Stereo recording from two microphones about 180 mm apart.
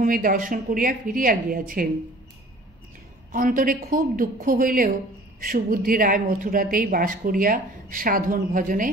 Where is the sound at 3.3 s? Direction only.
50° right (ahead or behind).